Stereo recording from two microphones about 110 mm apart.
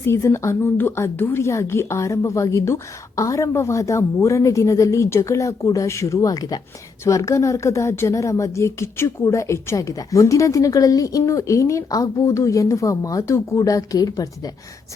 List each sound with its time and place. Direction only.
0.0 s speech: 25° left (ahead or behind)